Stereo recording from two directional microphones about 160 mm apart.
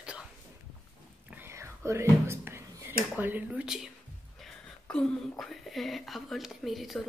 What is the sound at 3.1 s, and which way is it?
Speech, 10° right (ahead or behind).